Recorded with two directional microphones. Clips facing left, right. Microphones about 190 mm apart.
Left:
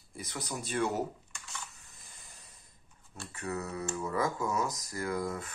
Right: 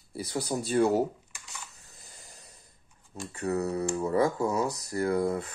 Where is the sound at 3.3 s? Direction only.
30° right (ahead or behind).